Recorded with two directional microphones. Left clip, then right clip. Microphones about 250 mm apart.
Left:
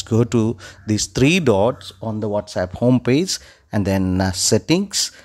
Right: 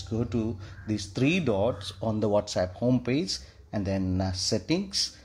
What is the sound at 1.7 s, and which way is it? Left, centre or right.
Speech, centre.